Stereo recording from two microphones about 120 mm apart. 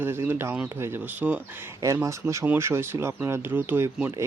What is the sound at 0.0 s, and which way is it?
Speech, 20° right (ahead or behind).